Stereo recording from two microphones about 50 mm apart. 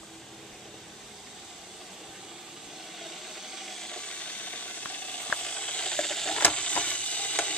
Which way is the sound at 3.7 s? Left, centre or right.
Centre.